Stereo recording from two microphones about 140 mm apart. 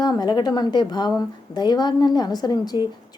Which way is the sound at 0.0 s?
30° left (ahead or behind).